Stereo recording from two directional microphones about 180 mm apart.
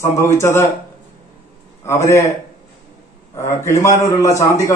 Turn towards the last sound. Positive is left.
turn(degrees=15)  # may be behind; listen again after turning